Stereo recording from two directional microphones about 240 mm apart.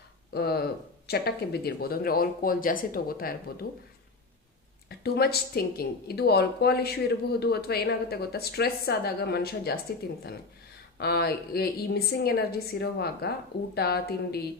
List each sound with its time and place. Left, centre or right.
0.3 s a woman's voice: left
4.9 s a woman's voice: left
11.0 s a woman's voice: left